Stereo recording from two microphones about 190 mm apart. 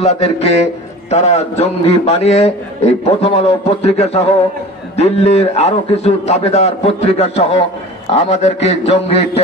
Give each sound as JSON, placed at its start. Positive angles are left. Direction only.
{"t": 0.0, "sound": "a man's voice", "side_deg": 35}